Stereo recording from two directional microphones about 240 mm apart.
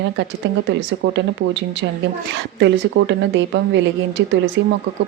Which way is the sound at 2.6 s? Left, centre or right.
Right.